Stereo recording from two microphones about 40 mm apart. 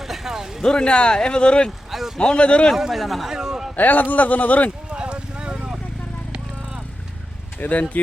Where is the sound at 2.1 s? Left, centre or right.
Left.